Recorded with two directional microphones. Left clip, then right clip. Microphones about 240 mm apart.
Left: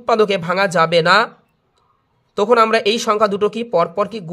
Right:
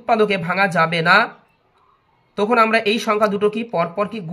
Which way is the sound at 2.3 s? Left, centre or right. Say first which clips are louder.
Left 2 dB; left.